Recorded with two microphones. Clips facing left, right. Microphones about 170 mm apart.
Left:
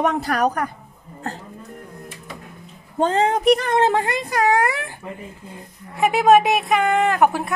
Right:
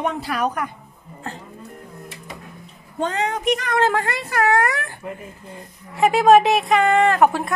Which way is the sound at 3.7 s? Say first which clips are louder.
Left 2 dB; 15° left (ahead or behind).